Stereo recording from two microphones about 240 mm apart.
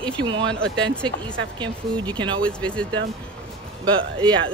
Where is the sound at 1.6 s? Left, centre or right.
Centre.